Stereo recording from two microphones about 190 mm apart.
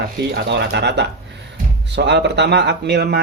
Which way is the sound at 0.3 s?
60° right (ahead or behind).